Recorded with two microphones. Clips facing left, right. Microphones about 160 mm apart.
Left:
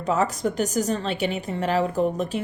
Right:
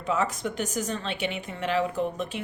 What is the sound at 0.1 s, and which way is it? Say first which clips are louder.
A woman's voice: left 4 dB; 40° left (ahead or behind).